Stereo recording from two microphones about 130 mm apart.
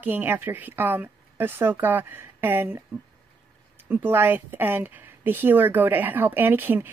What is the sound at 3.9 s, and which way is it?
Speech, 15° right (ahead or behind).